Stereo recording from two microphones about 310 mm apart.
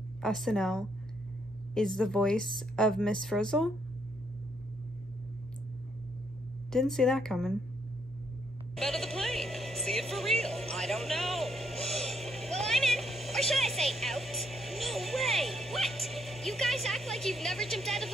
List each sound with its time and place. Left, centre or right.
0.2 s speech: centre
6.7 s speech: centre
8.7 s music: centre